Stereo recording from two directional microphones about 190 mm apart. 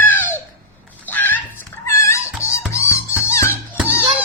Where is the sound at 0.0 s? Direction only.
10° left (ahead or behind).